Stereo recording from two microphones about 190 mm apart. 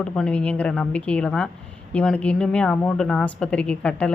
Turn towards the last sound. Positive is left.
turn(degrees=5)  # may be behind; listen again after turning